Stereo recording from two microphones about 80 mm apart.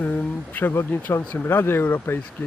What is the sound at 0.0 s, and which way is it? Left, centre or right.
Speech, centre.